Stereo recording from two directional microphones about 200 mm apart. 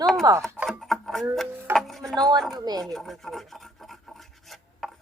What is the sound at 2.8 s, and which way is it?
Rub, centre (ahead or behind).